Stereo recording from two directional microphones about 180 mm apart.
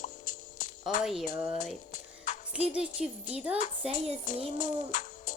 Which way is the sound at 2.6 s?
5° right (ahead or behind).